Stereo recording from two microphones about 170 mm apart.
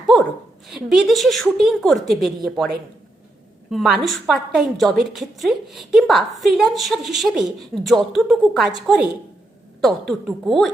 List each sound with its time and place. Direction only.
0.7 s a woman's voice: centre (ahead or behind)
3.7 s a woman's voice: centre (ahead or behind)